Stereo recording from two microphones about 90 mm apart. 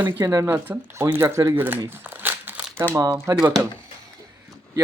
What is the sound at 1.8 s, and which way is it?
Crumpling, 25° right (ahead or behind).